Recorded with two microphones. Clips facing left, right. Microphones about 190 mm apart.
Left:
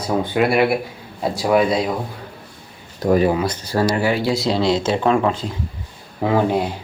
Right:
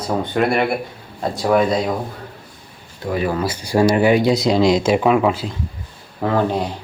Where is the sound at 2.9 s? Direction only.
40° left (ahead or behind).